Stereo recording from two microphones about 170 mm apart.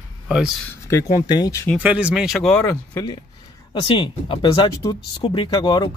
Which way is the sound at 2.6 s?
15° left (ahead or behind).